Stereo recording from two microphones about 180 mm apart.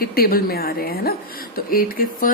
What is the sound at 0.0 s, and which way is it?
Speech, 55° left (ahead or behind).